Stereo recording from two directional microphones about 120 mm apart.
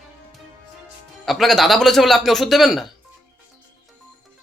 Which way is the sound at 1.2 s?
Centre (ahead or behind).